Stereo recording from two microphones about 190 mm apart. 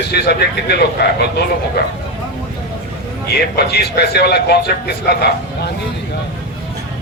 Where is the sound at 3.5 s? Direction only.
60° left (ahead or behind).